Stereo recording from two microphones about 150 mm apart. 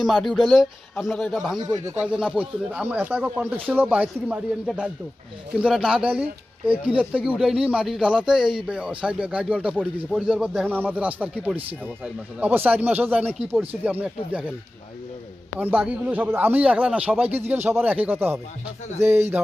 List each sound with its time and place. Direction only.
0.0 s speech: centre (ahead or behind)
15.5 s speech: 10° right (ahead or behind)